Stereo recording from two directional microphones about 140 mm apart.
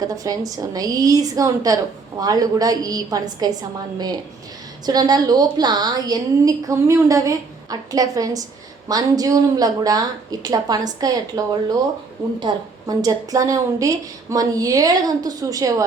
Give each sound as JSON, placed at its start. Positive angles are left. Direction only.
{"t": 0.0, "sound": "a woman's voice", "side_deg": -25}